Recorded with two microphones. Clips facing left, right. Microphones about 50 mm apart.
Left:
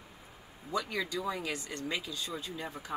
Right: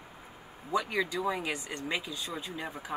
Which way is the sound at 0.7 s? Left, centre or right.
Centre.